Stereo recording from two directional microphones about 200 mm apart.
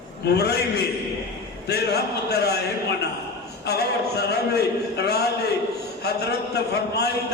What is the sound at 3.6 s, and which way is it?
A man's voice, 55° left (ahead or behind).